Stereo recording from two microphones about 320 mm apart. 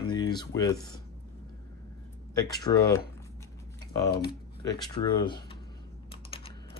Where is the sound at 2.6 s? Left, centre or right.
Centre.